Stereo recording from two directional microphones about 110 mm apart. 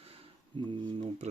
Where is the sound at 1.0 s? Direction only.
90° right.